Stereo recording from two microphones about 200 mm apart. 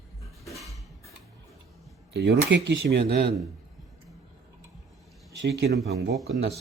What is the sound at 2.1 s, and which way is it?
Speech, 60° right (ahead or behind).